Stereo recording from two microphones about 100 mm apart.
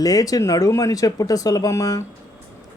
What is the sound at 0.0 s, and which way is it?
Speech, 40° left (ahead or behind).